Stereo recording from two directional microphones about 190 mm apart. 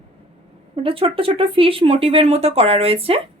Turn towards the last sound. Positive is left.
turn(degrees=-30)  # may be behind; listen again after turning